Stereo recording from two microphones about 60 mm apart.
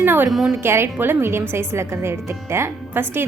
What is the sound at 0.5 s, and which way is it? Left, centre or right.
A woman's voice, right.